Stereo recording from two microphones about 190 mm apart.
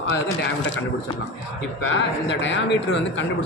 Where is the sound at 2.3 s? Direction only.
70° left (ahead or behind).